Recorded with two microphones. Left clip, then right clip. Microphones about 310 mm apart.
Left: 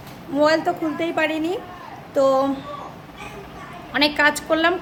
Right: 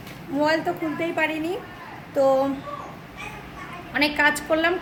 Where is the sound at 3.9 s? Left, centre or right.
Centre.